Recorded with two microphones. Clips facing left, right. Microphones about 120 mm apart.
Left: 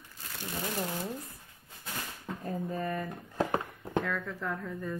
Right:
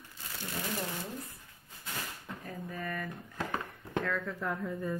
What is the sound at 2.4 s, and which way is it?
Speech, 30° left (ahead or behind).